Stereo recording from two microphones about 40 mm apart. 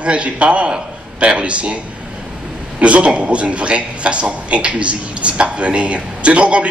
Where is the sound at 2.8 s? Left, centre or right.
Right.